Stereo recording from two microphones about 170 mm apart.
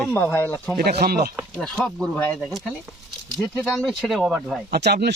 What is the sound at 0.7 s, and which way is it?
Speech, 65° right (ahead or behind).